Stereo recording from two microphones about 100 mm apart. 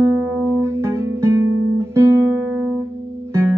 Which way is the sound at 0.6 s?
25° right (ahead or behind).